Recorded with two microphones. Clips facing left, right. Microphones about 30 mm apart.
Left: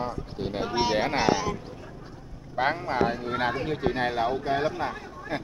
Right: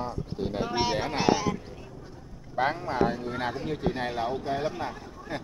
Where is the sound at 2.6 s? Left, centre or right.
Left.